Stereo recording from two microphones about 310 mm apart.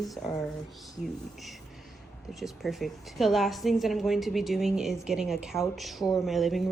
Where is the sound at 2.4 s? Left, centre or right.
Centre.